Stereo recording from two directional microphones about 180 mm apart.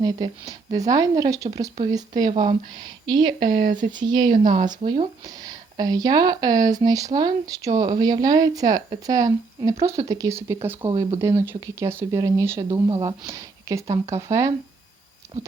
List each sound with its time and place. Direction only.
0.0 s speech: 20° right (ahead or behind)
2.3 s speech: 30° right (ahead or behind)